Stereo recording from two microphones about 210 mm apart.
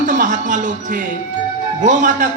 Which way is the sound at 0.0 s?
35° right (ahead or behind).